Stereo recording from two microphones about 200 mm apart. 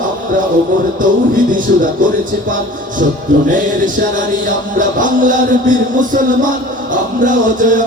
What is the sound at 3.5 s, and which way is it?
Music, 40° right (ahead or behind).